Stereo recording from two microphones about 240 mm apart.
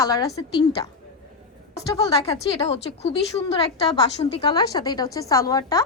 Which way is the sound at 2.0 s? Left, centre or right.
Left.